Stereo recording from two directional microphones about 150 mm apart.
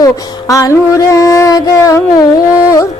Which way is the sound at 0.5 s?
20° left (ahead or behind).